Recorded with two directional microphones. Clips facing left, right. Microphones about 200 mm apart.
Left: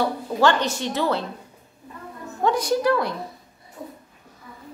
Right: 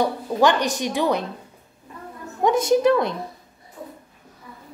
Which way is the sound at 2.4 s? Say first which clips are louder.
Right 3 dB; 20° right (ahead or behind).